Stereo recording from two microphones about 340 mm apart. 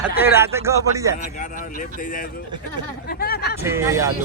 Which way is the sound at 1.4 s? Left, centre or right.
Left.